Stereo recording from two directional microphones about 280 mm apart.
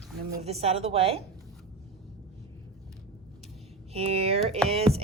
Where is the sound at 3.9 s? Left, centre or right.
Right.